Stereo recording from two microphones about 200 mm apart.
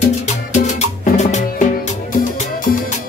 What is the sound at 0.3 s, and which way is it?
Music, 35° left (ahead or behind).